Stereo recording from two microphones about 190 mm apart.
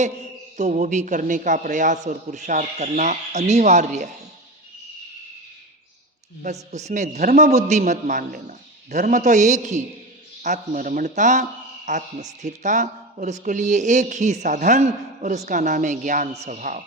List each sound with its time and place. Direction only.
0.5 s a man's voice: 40° right (ahead or behind)
6.4 s a man's voice: 35° right (ahead or behind)